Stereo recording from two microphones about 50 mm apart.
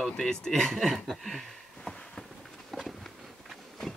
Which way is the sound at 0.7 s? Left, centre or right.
Centre.